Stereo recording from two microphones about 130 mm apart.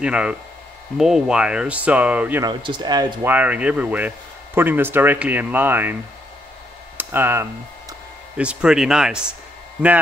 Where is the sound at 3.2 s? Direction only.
15° right (ahead or behind).